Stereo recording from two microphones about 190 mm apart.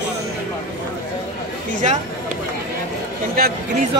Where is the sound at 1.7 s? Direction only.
40° right (ahead or behind).